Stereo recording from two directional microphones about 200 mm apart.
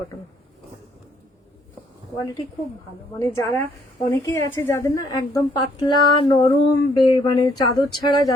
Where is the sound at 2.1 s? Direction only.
20° left (ahead or behind).